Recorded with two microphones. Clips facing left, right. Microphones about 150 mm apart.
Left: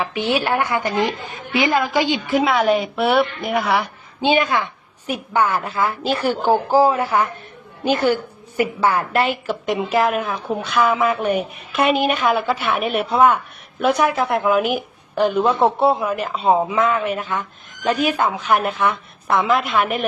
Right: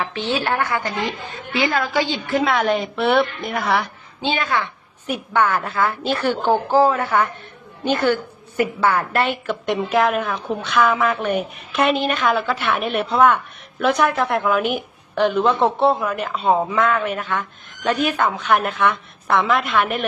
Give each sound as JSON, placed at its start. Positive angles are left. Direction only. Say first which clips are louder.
{"t": 0.0, "sound": "a woman's voice", "louder": "left 2 dB", "side_deg": 10}
{"t": 4.2, "sound": "a woman's voice", "louder": "left 4 dB", "side_deg": 15}
{"t": 7.9, "sound": "a woman's voice", "louder": "left 1 dB", "side_deg": 30}
{"t": 9.1, "sound": "a woman's voice", "louder": "left 1 dB", "side_deg": 10}